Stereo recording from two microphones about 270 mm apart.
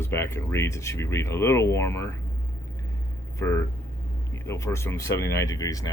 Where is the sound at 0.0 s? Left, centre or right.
Centre.